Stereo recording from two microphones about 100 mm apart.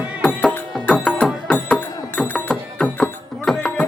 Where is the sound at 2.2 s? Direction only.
15° left (ahead or behind).